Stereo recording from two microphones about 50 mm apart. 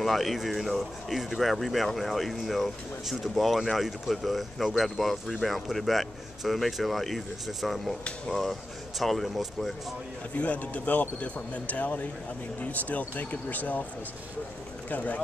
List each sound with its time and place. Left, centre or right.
0.0 s speech: centre
10.3 s speech: left
14.9 s speech: left